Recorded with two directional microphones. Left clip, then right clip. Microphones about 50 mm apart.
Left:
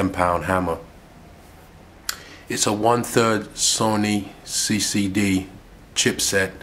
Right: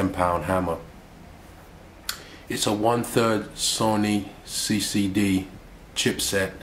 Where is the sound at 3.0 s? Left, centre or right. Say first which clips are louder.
Left 3 dB; left.